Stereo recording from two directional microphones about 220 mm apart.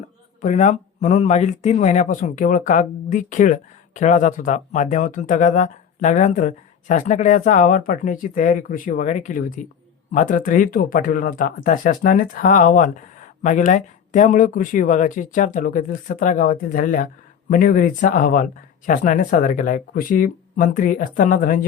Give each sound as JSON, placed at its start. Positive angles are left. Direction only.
{"t": 0.4, "sound": "speech", "side_deg": 35}